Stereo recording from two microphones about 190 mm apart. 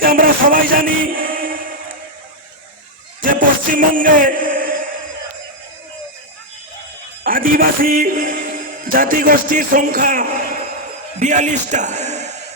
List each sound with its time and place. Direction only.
0.0 s music: 50° right (ahead or behind)
3.2 s a sound: 45° right (ahead or behind)
7.3 s a man's voice: 45° right (ahead or behind)